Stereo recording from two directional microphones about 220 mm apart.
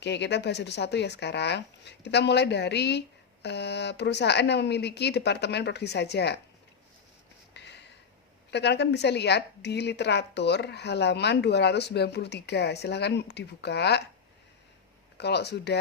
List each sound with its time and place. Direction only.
0.0 s a woman's voice: 50° left (ahead or behind)
7.5 s a sound: 50° left (ahead or behind)
8.4 s a woman's voice: 50° left (ahead or behind)
15.2 s a woman's voice: 50° left (ahead or behind)